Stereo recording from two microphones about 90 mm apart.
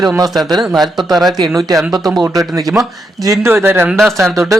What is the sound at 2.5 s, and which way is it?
Speech, 40° right (ahead or behind).